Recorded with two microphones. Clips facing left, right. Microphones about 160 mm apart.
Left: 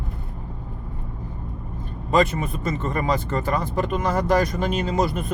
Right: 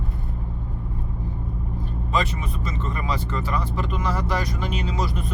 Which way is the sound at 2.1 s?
50° left (ahead or behind).